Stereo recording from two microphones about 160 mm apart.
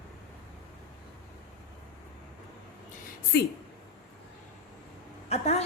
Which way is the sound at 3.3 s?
90° left.